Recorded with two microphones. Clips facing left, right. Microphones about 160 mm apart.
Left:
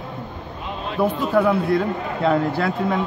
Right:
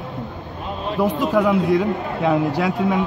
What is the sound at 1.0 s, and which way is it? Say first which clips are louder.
Speech: even; 15° right (ahead or behind).